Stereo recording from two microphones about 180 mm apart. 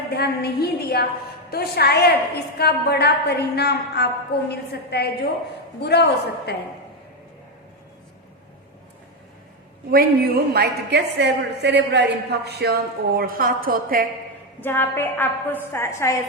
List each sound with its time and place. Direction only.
0.1 s a woman's voice: 65° left (ahead or behind)
9.9 s a woman's voice: 55° right (ahead or behind)
14.6 s a woman's voice: 10° left (ahead or behind)